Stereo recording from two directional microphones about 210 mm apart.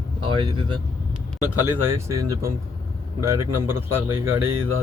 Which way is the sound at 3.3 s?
10° right (ahead or behind).